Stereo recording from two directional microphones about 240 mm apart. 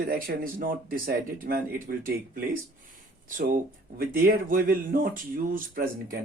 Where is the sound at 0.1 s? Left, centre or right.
Right.